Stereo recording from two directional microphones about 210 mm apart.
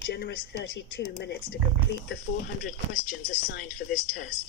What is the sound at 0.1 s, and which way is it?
Speech, 50° left (ahead or behind).